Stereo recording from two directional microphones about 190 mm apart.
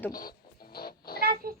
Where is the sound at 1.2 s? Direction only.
50° right (ahead or behind).